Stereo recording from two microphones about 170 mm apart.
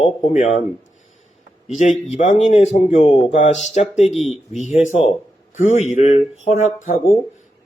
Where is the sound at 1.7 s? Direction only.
45° left (ahead or behind).